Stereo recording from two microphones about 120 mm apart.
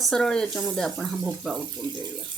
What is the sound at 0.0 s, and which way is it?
Speech, 5° left (ahead or behind).